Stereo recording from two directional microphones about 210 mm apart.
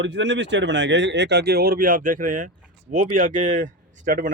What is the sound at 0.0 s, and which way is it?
Speech, 60° right (ahead or behind).